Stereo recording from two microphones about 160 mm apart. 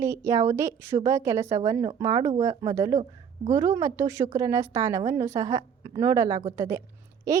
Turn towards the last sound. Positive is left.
turn(degrees=-20)  # may be behind; listen again after turning